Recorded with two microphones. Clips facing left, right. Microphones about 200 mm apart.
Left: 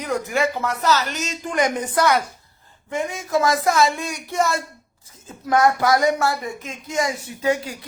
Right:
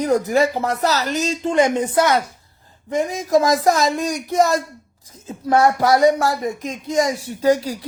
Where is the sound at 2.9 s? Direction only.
35° right (ahead or behind).